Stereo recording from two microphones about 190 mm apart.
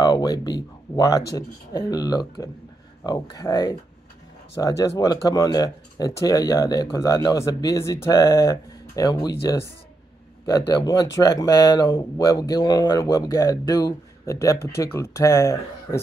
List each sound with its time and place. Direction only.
0.0 s speech: 20° left (ahead or behind)